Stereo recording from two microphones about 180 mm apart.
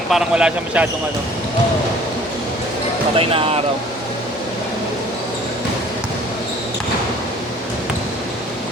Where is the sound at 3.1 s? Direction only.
30° right (ahead or behind).